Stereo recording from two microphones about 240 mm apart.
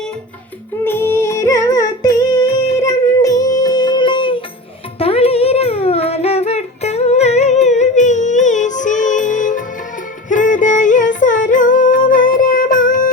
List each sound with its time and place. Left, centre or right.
0.9 s music: centre
4.9 s child singing: left
10.2 s music: left